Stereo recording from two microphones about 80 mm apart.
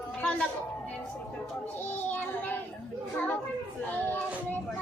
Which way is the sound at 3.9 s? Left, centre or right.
Left.